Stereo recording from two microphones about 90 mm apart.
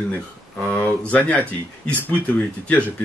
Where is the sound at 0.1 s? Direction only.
15° left (ahead or behind).